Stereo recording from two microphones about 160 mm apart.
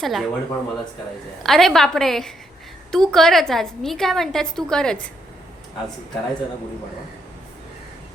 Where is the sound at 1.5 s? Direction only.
Centre (ahead or behind).